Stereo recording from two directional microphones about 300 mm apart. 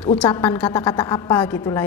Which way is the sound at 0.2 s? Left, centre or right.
Centre.